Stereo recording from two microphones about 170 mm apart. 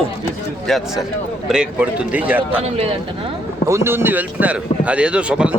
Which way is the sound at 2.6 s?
35° right (ahead or behind).